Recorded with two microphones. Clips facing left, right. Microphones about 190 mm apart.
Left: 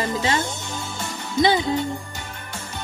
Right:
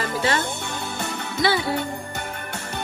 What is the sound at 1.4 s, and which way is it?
Music, 20° left (ahead or behind).